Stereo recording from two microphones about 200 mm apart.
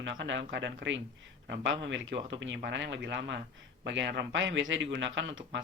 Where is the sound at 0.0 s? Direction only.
65° right (ahead or behind).